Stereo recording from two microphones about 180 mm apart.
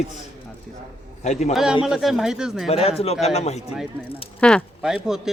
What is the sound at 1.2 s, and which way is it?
Speech, 40° left (ahead or behind).